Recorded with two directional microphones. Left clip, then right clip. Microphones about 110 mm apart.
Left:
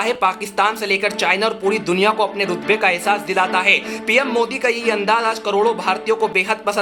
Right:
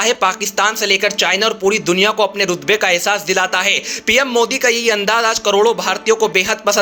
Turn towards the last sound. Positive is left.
turn(degrees=-25)  # may be behind; listen again after turning